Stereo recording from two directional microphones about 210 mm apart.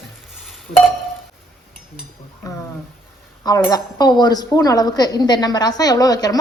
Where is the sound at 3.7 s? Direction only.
20° left (ahead or behind).